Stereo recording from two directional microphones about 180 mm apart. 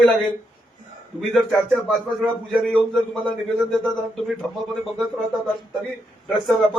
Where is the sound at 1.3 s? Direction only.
Centre (ahead or behind).